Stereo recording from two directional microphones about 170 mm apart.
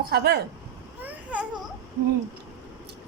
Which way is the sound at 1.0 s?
10° right (ahead or behind).